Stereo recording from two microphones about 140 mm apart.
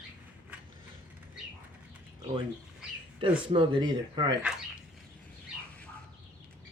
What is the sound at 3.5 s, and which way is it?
Speech, 35° right (ahead or behind).